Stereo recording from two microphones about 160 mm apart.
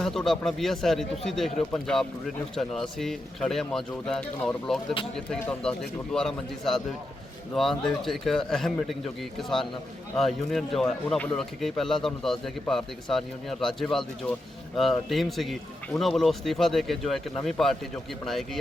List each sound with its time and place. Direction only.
0.0 s speech: centre (ahead or behind)